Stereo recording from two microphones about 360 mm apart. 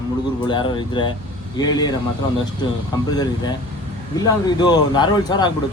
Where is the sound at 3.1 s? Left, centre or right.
Centre.